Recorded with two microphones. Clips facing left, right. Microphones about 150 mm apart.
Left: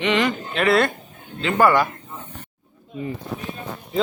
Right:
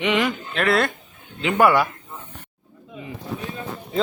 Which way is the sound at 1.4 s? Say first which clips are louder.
Even; 15° right (ahead or behind).